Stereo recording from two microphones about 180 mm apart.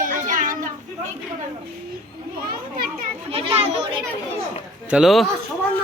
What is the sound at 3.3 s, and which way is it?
Speech, 30° right (ahead or behind).